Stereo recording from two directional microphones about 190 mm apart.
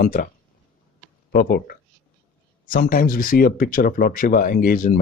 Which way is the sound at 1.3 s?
55° left (ahead or behind).